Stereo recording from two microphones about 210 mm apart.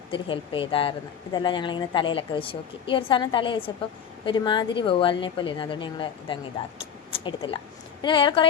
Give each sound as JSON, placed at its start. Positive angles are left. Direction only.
{"t": 0.1, "sound": "speech", "side_deg": 25}